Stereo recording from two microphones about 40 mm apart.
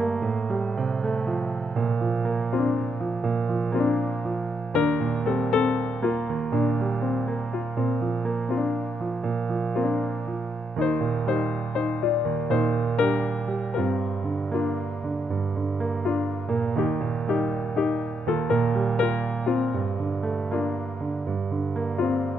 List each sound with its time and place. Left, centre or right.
0.0 s music: centre
9.8 s music: centre
16.1 s music: centre
21.9 s music: centre